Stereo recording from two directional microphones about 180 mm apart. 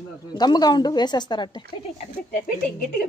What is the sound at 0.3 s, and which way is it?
Speech, 25° left (ahead or behind).